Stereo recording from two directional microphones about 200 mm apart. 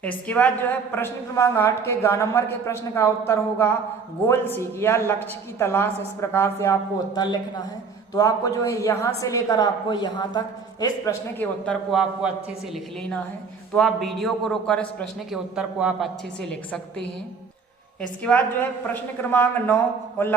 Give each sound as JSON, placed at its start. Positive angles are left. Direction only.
{"t": 0.0, "sound": "a woman's voice", "side_deg": 5}
{"t": 11.6, "sound": "a man's voice", "side_deg": 0}
{"t": 13.7, "sound": "a man's voice", "side_deg": 0}
{"t": 18.2, "sound": "a woman's voice", "side_deg": 5}